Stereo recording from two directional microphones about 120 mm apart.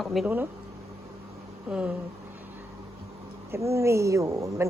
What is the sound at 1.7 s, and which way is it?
Speech, 10° right (ahead or behind).